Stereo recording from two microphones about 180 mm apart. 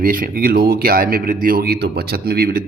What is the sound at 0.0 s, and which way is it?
A man's voice, 50° right (ahead or behind).